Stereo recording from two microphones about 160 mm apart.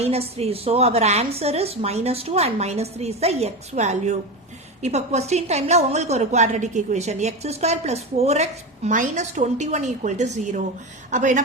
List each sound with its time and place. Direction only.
0.0 s a woman's voice: 40° right (ahead or behind)